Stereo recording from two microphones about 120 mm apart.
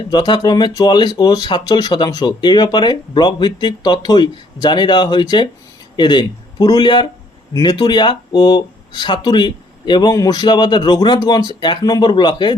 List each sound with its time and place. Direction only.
0.0 s speech: 35° left (ahead or behind)